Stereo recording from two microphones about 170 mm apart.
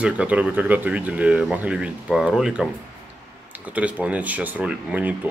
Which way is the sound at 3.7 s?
10° right (ahead or behind).